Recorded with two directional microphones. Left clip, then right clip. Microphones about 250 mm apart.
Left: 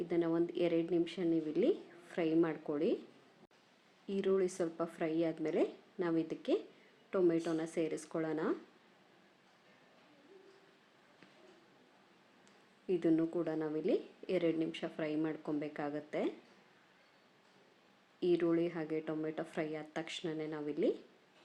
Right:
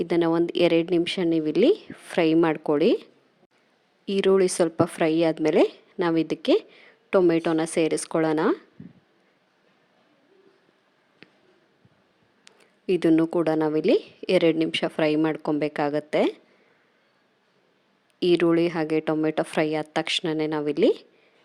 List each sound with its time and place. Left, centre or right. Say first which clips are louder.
0.0 s a woman's voice: right 12 dB; right
4.0 s a woman's voice: right 14 dB; right
12.5 s a woman's voice: right 12 dB; right
18.2 s a woman's voice: right 12 dB; right